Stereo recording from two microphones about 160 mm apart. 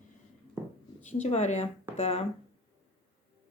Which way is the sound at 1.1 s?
45° left (ahead or behind).